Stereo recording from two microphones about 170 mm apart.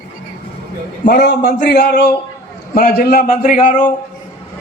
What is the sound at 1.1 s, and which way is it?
A man's voice, 80° left.